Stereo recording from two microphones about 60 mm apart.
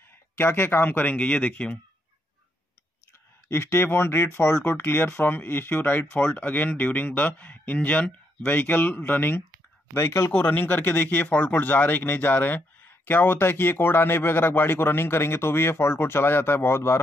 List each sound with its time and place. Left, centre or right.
0.4 s speech: left
1.1 s speech: centre
3.4 s speech: left
9.9 s speech: left
10.3 s speech: left